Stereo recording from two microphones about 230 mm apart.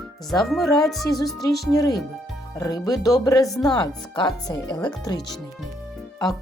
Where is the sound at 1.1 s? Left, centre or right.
Centre.